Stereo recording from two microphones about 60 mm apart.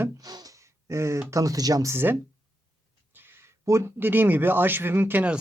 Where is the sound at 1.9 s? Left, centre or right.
Right.